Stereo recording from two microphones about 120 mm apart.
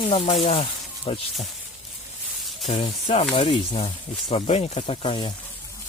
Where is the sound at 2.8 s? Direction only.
75° left (ahead or behind).